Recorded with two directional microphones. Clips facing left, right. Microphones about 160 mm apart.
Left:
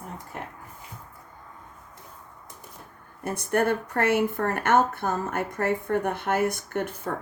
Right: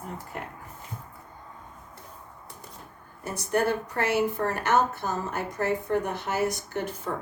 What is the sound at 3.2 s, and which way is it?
Speech, 55° left (ahead or behind).